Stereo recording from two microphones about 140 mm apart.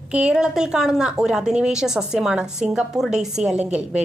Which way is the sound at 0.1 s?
5° right (ahead or behind).